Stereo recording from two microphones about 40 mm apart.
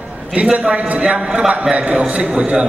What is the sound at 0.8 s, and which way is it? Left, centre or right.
A man's voice, right.